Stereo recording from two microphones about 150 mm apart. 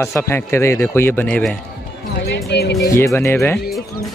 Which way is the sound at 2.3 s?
90° left.